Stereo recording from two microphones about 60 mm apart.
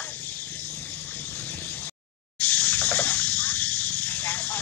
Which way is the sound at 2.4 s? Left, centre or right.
Left.